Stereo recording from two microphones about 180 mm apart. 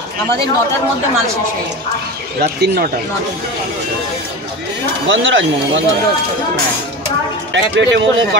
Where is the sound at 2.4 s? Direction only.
60° right (ahead or behind).